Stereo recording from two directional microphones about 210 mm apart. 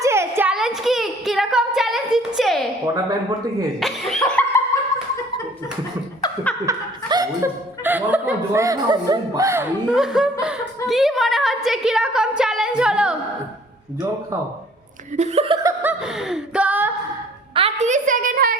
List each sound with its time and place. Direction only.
0.0 s a sound: 10° right (ahead or behind)
2.8 s speech: 15° right (ahead or behind)
3.8 s cough: centre (ahead or behind)
6.7 s speech: 15° right (ahead or behind)
9.9 s a woman's voice: centre (ahead or behind)
15.1 s speech: 30° right (ahead or behind)
15.6 s chuckle: 10° right (ahead or behind)
17.5 s a woman's voice: 30° right (ahead or behind)